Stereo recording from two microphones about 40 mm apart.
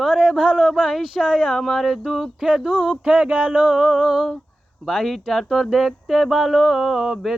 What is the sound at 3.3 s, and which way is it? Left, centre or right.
Speech, right.